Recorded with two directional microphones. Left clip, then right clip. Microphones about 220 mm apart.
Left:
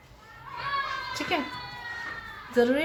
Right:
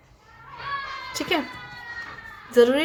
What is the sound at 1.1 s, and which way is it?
Speech, 40° right (ahead or behind).